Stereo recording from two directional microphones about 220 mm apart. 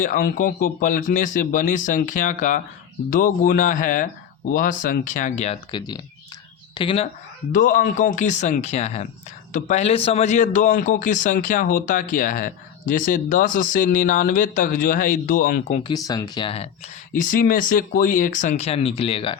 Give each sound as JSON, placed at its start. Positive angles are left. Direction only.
{"t": 0.0, "sound": "a man's voice", "side_deg": 40}
{"t": 7.5, "sound": "a man's voice", "side_deg": 35}
{"t": 15.9, "sound": "speech", "side_deg": 15}
{"t": 17.1, "sound": "a man's voice", "side_deg": 40}